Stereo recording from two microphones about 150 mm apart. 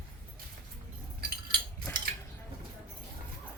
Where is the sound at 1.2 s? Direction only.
90° right.